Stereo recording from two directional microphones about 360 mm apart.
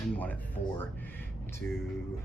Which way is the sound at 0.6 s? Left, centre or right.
Left.